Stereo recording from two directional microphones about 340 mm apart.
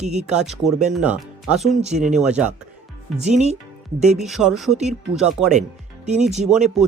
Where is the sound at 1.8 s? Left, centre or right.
Centre.